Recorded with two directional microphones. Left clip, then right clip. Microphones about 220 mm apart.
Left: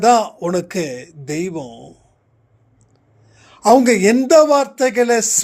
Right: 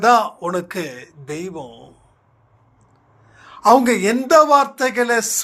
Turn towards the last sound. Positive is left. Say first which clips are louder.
# left 3 dB
turn(degrees=55)  # may be behind; listen again after turning